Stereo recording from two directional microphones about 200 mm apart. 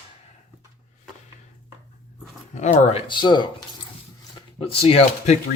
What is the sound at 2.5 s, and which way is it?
Speech, 35° left (ahead or behind).